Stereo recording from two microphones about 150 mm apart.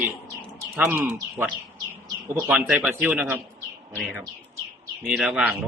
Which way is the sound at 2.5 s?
5° right (ahead or behind).